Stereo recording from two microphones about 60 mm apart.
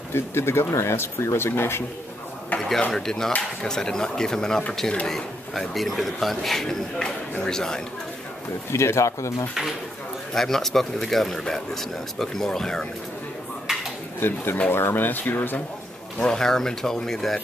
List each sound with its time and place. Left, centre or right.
0.1 s speech: left
2.5 s speech: left
2.9 s speech: centre
8.7 s speech: left
10.3 s speech: centre
13.7 s a sound: centre
14.2 s speech: left
16.2 s speech: centre